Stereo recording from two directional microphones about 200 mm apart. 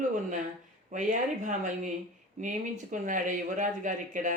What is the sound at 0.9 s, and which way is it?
Speech, 40° right (ahead or behind).